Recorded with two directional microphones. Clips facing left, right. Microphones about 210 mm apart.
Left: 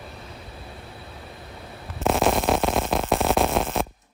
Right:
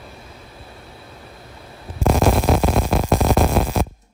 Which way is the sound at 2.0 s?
Centre (ahead or behind).